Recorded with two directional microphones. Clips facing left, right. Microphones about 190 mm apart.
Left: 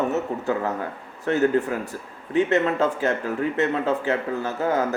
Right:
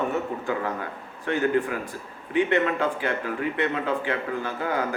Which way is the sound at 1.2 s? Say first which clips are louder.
Left 3 dB; 40° left (ahead or behind).